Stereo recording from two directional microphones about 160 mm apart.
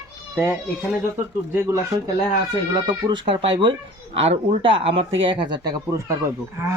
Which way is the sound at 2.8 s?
30° right (ahead or behind).